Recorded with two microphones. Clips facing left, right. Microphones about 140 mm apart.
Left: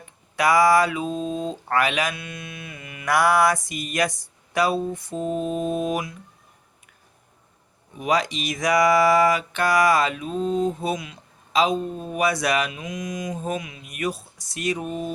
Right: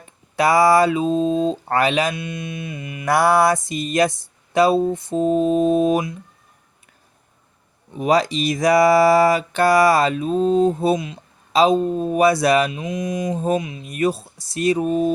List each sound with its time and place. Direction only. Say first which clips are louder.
0.3 s speech: right 3 dB; 30° right (ahead or behind)
7.9 s speech: right 5 dB; 35° right (ahead or behind)